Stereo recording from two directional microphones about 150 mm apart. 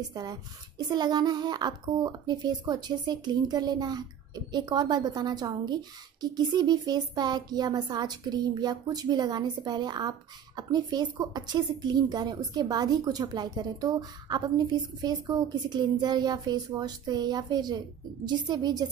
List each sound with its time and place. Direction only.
0.1 s a woman's voice: 25° right (ahead or behind)